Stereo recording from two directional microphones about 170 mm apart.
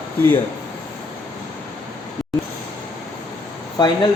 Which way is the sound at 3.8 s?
25° left (ahead or behind).